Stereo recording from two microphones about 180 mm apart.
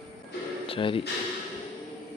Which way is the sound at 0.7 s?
30° left (ahead or behind).